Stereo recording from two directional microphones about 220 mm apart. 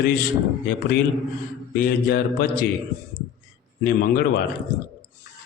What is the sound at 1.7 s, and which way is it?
Speech, 40° left (ahead or behind).